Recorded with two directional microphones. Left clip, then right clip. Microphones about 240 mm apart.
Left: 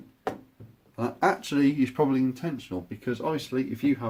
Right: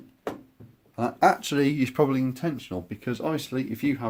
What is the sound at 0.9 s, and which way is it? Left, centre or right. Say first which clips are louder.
Speech: right 4 dB; right.